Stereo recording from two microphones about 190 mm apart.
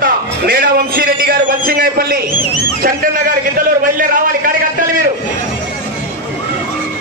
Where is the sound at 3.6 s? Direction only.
45° right (ahead or behind).